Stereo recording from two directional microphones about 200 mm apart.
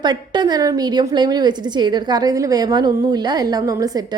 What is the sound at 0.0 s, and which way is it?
A woman's voice, 20° right (ahead or behind).